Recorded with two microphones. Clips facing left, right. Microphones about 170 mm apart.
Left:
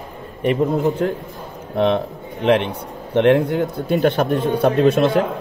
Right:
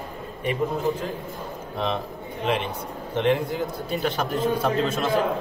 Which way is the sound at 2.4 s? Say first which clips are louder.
Left 9 dB; 65° left (ahead or behind).